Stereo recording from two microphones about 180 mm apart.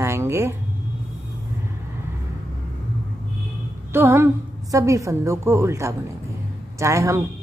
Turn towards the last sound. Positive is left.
turn(degrees=-15)  # may be behind; listen again after turning